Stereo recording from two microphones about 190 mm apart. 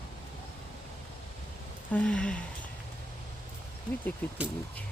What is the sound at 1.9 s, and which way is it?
Speech, 5° left (ahead or behind).